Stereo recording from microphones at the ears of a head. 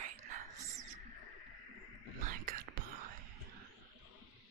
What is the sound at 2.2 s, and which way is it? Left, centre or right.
Whispering, right.